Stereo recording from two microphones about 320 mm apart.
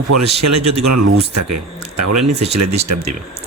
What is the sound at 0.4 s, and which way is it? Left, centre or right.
Speech, right.